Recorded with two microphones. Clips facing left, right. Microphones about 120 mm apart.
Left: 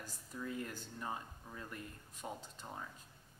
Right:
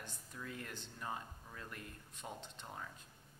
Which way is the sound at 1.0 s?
15° left (ahead or behind).